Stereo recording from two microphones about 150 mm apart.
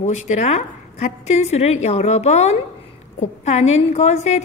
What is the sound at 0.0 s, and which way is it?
A woman's voice, 50° left (ahead or behind).